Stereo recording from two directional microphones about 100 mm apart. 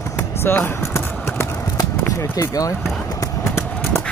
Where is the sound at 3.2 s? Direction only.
25° left (ahead or behind).